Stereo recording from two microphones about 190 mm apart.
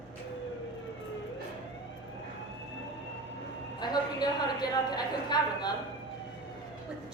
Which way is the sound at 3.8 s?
20° left (ahead or behind).